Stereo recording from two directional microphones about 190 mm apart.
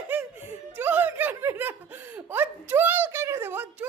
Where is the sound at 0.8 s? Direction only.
10° right (ahead or behind).